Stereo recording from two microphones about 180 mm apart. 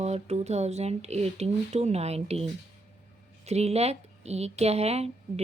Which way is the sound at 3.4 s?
35° right (ahead or behind).